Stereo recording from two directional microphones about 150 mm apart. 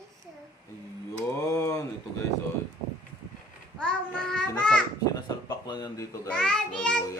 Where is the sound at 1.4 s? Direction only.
20° left (ahead or behind).